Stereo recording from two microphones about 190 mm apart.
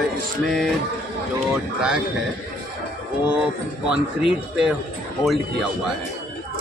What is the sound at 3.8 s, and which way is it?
Speech, 5° right (ahead or behind).